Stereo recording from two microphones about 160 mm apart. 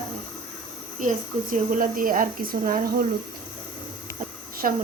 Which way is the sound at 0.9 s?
55° right (ahead or behind).